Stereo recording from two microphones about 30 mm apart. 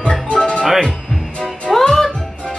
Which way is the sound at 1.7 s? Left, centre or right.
Centre.